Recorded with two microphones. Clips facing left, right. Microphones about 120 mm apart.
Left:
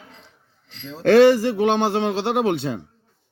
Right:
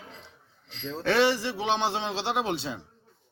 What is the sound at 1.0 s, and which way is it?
Speech, 50° left (ahead or behind).